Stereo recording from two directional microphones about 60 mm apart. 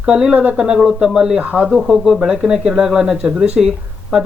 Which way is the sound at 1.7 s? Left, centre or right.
Centre.